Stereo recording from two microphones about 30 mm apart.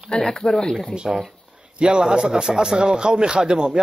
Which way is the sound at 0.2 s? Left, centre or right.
Left.